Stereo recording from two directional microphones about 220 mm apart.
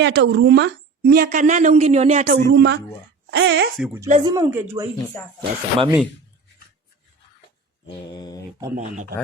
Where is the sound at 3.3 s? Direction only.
50° right (ahead or behind).